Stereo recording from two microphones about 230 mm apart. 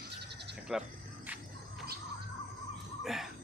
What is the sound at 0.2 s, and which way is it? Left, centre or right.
Goat, right.